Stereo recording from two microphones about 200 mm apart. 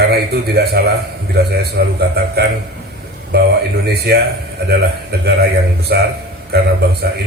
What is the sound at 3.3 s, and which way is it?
Speech, 50° right (ahead or behind).